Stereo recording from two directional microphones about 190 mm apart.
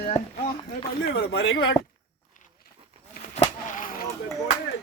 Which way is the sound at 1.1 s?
65° left (ahead or behind).